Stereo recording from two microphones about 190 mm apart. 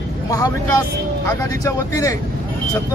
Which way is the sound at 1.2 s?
15° left (ahead or behind).